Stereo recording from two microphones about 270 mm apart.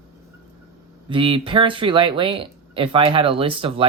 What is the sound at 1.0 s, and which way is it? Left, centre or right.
Speech, centre.